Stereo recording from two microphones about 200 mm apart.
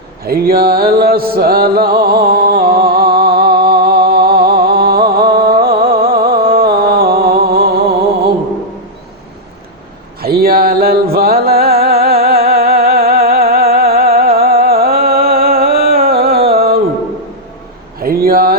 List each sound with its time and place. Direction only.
0.3 s music: 50° right (ahead or behind)
10.2 s music: 50° right (ahead or behind)
18.0 s a sound: 45° right (ahead or behind)